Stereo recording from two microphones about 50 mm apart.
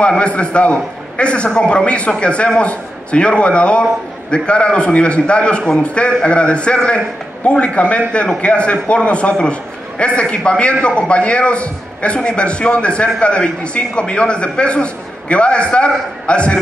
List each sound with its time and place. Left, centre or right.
0.2 s a man's voice: left